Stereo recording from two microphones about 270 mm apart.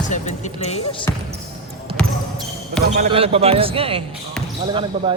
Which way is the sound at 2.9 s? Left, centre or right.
Right.